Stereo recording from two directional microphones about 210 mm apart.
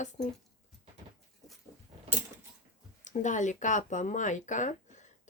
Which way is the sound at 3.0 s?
35° left (ahead or behind).